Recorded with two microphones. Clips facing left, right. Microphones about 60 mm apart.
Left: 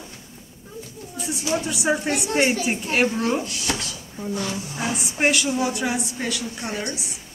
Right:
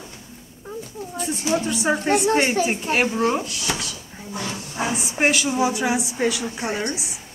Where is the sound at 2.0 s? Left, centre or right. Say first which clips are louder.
Right 6 dB; right.